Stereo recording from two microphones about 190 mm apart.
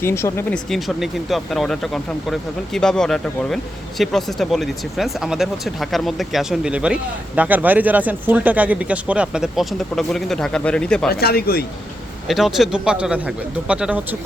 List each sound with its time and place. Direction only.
0.0 s speech: 15° left (ahead or behind)
0.7 s speech: centre (ahead or behind)
11.1 s speech: 55° left (ahead or behind)
12.3 s speech: centre (ahead or behind)